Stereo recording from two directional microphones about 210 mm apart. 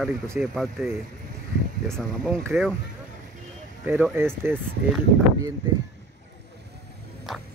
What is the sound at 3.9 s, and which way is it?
Speech, 10° right (ahead or behind).